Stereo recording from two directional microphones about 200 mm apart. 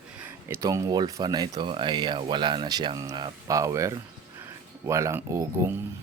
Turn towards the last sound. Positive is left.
turn(degrees=-15)  # may be behind; listen again after turning